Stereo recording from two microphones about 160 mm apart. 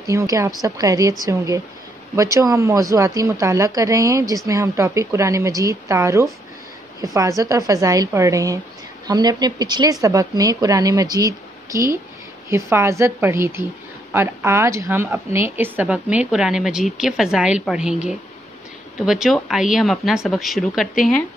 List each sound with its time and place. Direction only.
0.0 s a woman's voice: 20° right (ahead or behind); by 20.9 s centre (ahead or behind)